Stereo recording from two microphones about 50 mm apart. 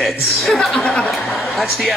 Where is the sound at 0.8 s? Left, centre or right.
Left.